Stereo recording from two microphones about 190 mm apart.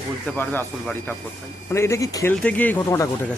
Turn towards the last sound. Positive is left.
turn(degrees=10)  # may be behind; listen again after turning